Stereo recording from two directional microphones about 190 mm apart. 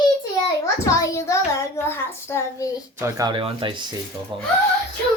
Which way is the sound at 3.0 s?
20° right (ahead or behind).